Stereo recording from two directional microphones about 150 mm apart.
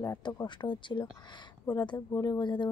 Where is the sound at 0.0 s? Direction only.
20° left (ahead or behind).